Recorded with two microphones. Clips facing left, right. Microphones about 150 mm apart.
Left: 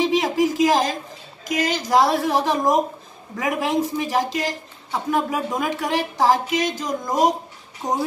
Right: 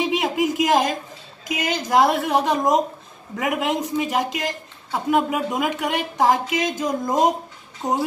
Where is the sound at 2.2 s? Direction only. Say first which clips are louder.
Even; centre (ahead or behind).